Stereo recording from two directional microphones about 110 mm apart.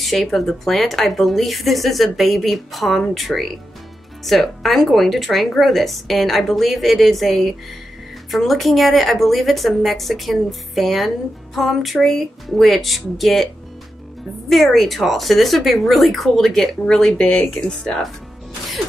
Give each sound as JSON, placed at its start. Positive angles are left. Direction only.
{"t": 0.0, "sound": "speech", "side_deg": 0}
{"t": 14.5, "sound": "speech", "side_deg": 0}